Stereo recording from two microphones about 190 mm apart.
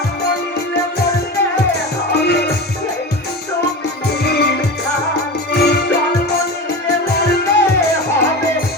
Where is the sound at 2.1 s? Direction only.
60° left (ahead or behind).